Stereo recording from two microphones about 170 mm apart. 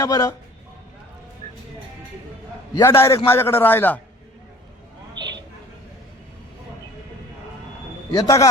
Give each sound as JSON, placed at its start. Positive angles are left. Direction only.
{"t": 0.0, "sound": "a man's voice", "side_deg": 20}
{"t": 2.7, "sound": "a man's voice", "side_deg": 15}
{"t": 8.1, "sound": "a man's voice", "side_deg": 20}